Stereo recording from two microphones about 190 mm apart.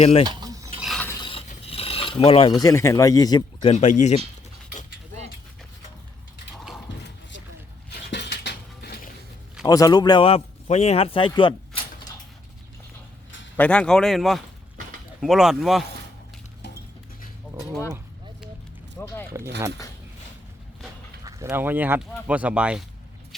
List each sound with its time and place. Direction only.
0.0 s cutlery: 30° left (ahead or behind)
0.3 s cutlery: 20° right (ahead or behind)
0.8 s filing: centre (ahead or behind)
1.2 s a sound: 30° left (ahead or behind)
1.5 s mechanisms: 30° left (ahead or behind)
7.9 s dishes: 65° left (ahead or behind)
9.6 s speech: 20° left (ahead or behind)
11.3 s a sound: 25° left (ahead or behind)
13.6 s speech: 5° left (ahead or behind)
18.9 s a sound: 10° left (ahead or behind)
21.2 s speech: 15° right (ahead or behind)